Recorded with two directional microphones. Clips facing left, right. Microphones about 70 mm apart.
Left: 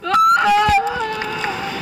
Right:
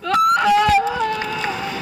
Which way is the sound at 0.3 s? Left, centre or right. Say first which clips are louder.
Right 1 dB; left.